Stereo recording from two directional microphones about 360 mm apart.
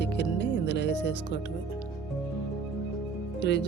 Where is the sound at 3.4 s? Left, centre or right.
Left.